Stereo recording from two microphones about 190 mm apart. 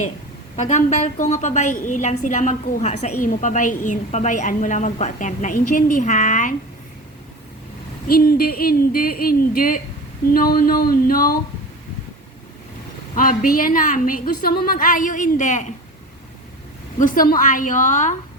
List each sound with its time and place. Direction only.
0.5 s a woman's voice: 40° left (ahead or behind)
8.0 s a woman's voice: 50° left (ahead or behind)
13.1 s a woman's voice: 45° left (ahead or behind)
17.0 s a woman's voice: 45° left (ahead or behind)